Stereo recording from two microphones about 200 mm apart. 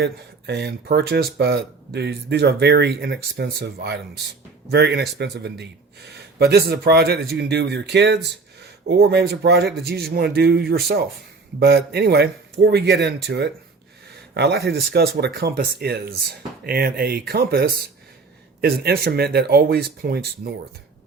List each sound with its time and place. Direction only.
0.0 s speech: 55° right (ahead or behind)